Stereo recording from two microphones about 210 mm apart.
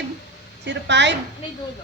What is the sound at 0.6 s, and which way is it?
Speech, 55° right (ahead or behind).